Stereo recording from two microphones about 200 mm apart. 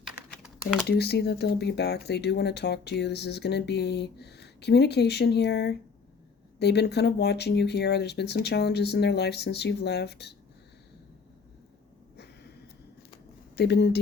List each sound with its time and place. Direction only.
0.0 s typing: centre (ahead or behind)
0.9 s speech: 55° left (ahead or behind)
12.1 s a sound: 50° left (ahead or behind)
13.6 s speech: 55° left (ahead or behind)